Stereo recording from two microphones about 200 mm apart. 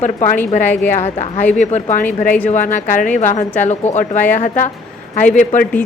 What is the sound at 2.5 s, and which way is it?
A woman's voice, 40° left (ahead or behind).